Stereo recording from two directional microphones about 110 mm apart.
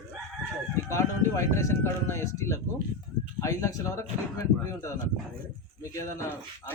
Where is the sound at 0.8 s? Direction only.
25° left (ahead or behind).